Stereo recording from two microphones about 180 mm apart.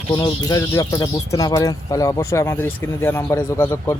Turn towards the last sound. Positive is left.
turn(degrees=15)  # may be behind; listen again after turning